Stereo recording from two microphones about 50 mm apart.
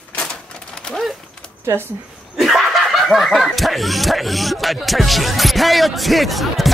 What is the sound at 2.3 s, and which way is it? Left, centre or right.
Speech, centre.